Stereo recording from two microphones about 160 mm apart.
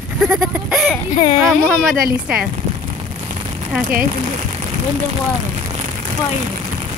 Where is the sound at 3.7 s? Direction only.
10° right (ahead or behind).